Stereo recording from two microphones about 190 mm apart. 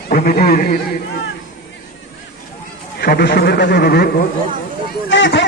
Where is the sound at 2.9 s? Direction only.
60° left (ahead or behind).